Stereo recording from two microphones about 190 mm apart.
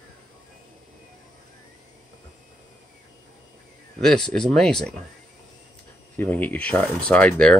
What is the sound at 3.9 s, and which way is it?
Speech, 5° left (ahead or behind).